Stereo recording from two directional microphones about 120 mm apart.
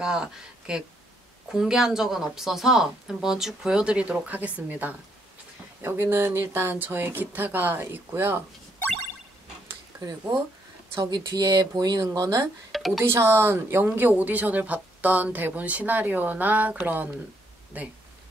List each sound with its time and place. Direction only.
0.0 s a woman's voice: 5° right (ahead or behind)
11.0 s speech: 40° right (ahead or behind)
12.7 s a sound: centre (ahead or behind)
13.0 s a woman's voice: 20° right (ahead or behind)